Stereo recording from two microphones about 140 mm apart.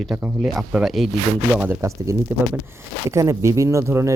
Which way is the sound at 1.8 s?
20° right (ahead or behind).